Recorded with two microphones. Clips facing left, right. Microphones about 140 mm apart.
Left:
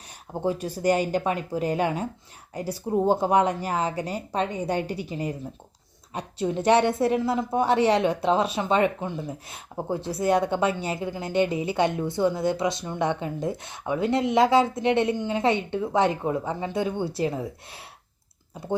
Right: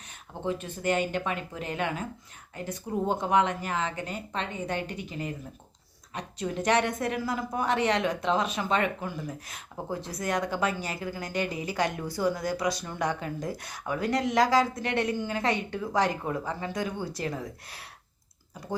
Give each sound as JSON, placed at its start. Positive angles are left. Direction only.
{"t": 0.4, "sound": "a woman's voice", "side_deg": 35}